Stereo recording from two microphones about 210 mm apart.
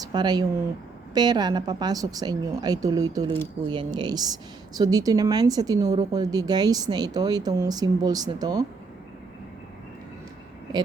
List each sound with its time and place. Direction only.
0.0 s a woman's voice: 20° right (ahead or behind)